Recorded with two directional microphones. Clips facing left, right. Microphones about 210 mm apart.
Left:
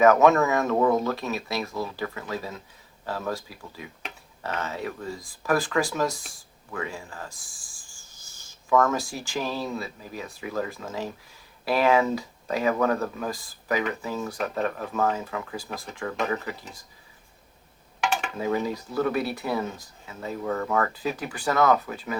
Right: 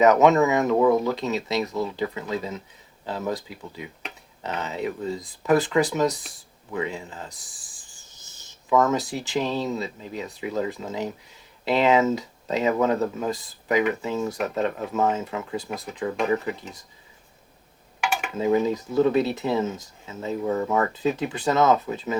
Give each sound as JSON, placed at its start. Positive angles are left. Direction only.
{"t": 0.0, "sound": "speech", "side_deg": -20}
{"t": 6.7, "sound": "owl", "side_deg": -20}
{"t": 11.6, "sound": "speech", "side_deg": -20}
{"t": 18.0, "sound": "a sound", "side_deg": -5}
{"t": 18.3, "sound": "speech", "side_deg": -20}